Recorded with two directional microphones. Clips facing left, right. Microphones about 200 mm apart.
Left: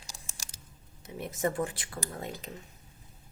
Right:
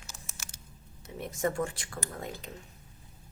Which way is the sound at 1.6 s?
25° left (ahead or behind).